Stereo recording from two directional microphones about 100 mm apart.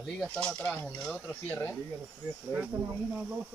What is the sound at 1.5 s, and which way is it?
Speech, 20° left (ahead or behind).